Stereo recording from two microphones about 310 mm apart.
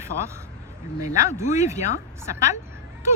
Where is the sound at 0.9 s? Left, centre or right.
Left.